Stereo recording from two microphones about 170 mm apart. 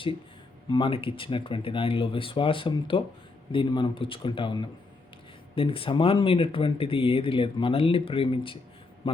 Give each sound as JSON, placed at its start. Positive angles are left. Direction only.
{"t": 0.7, "sound": "speech", "side_deg": 30}